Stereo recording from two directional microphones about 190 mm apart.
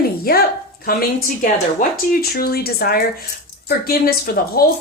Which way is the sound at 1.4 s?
45° left (ahead or behind).